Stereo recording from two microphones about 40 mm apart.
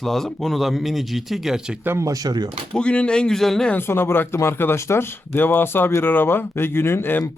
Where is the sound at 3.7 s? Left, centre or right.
Left.